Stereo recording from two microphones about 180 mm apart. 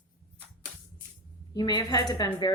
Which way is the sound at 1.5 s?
25° left (ahead or behind).